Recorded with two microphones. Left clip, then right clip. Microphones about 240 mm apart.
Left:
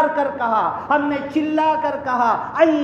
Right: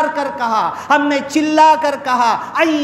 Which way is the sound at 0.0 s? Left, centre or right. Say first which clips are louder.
Right 1 dB; right.